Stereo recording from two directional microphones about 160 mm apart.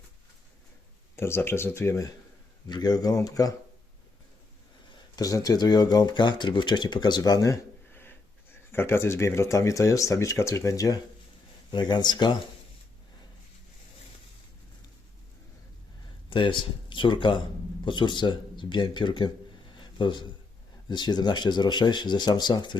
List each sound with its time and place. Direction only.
1.1 s speech: 15° left (ahead or behind)
5.1 s speech: 20° left (ahead or behind)
16.3 s speech: 30° left (ahead or behind)